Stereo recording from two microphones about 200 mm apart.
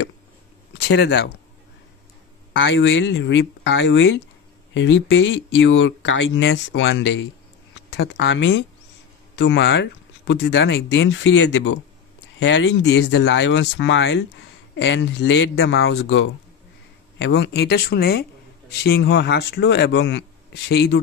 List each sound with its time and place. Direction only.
0.7 s speech: 60° left (ahead or behind)
2.5 s speech: 70° left (ahead or behind)
7.9 s speech: 60° left (ahead or behind)
17.2 s speech: 55° left (ahead or behind)